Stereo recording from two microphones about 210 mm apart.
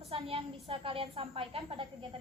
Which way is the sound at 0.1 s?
25° right (ahead or behind).